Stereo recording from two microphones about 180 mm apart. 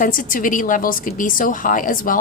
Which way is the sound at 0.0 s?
50° left (ahead or behind).